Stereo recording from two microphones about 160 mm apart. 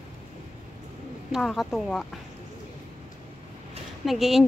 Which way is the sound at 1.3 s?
Centre (ahead or behind).